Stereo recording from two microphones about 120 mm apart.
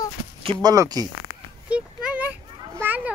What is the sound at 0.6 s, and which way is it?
Speech, 30° right (ahead or behind).